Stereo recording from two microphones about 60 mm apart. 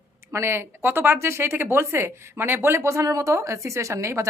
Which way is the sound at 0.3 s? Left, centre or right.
Right.